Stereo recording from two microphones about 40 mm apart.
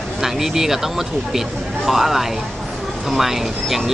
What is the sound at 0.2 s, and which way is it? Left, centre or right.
Speech, centre.